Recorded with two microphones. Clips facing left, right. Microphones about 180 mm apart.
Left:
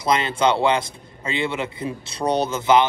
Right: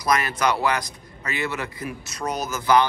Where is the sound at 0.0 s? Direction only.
25° left (ahead or behind).